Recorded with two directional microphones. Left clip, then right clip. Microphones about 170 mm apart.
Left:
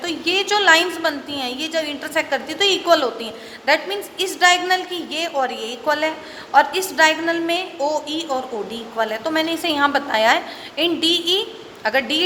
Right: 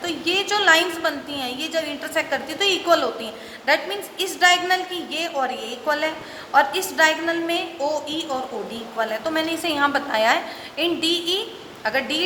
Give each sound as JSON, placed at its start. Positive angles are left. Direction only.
{"t": 0.0, "sound": "a woman's voice", "side_deg": 25}